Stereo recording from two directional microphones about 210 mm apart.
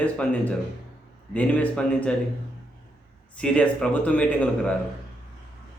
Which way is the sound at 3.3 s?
5° left (ahead or behind).